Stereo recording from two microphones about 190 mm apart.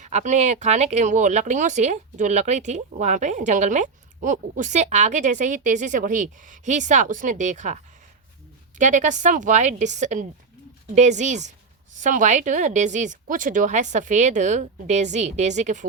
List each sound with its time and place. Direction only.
0.0 s speech: 40° right (ahead or behind)
8.8 s speech: 40° right (ahead or behind)